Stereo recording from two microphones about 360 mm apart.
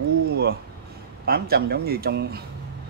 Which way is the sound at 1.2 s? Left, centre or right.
Right.